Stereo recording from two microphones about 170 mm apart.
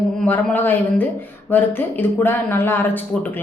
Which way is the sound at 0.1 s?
5° left (ahead or behind).